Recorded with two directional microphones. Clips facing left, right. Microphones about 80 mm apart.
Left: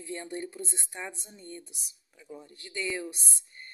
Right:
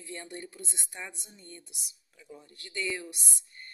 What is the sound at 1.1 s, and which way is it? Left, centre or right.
Speech, left.